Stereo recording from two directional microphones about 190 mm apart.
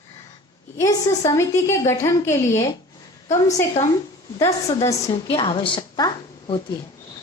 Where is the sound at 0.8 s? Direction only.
15° left (ahead or behind).